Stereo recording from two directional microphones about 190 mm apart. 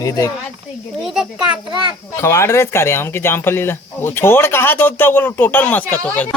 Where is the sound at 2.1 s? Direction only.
15° left (ahead or behind).